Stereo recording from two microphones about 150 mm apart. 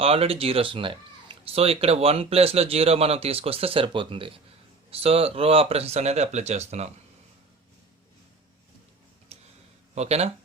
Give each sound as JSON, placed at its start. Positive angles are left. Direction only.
{"t": 0.0, "sound": "speech", "side_deg": -40}
{"t": 9.3, "sound": "a sound", "side_deg": -45}
{"t": 9.9, "sound": "speech", "side_deg": -45}